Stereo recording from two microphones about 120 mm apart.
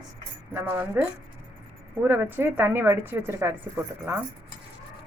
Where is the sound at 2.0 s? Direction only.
15° right (ahead or behind).